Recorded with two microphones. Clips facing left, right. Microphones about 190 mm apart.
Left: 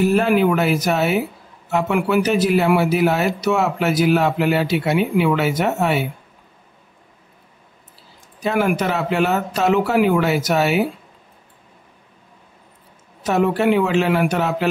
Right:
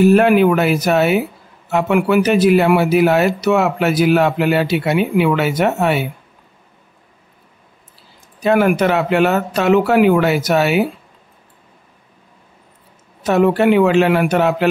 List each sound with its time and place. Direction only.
0.1 s a man's voice: 65° right (ahead or behind)
8.5 s speech: 65° right (ahead or behind)
13.2 s a man's voice: 65° right (ahead or behind)